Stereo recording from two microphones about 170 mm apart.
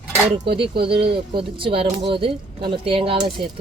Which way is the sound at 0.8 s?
30° right (ahead or behind).